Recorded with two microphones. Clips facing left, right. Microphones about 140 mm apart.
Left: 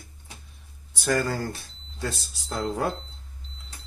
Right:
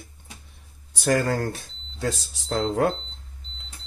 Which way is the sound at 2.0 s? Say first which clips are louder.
Right 4 dB; 90° right.